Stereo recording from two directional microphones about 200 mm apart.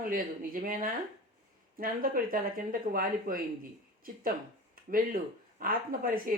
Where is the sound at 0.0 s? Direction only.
45° right (ahead or behind).